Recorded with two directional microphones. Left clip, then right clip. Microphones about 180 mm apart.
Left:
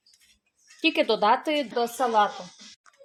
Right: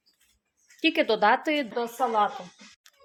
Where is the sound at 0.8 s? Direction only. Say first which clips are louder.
Even; centre (ahead or behind).